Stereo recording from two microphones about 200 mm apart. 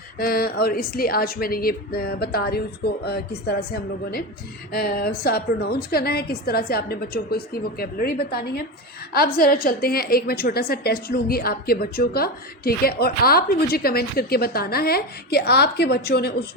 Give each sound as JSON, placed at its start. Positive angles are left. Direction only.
{"t": 0.2, "sound": "a woman's voice", "side_deg": 45}